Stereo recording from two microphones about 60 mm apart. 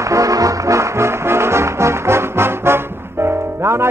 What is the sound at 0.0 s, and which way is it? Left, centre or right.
Music, right.